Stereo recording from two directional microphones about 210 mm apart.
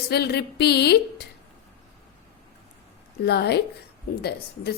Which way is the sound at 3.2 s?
50° left (ahead or behind).